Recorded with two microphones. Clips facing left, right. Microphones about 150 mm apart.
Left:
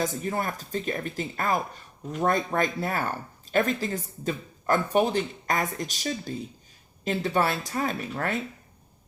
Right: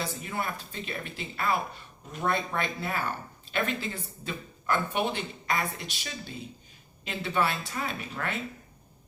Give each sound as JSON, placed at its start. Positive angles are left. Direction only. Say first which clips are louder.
{"t": 0.0, "sound": "speech", "louder": "left 5 dB", "side_deg": 40}